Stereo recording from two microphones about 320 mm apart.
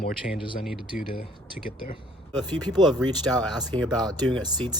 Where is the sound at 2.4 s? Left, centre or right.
Centre.